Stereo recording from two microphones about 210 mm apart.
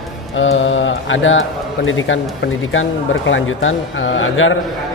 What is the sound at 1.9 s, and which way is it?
A man's voice, 65° left (ahead or behind).